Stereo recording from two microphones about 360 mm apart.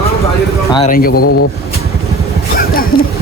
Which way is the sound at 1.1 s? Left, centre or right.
Left.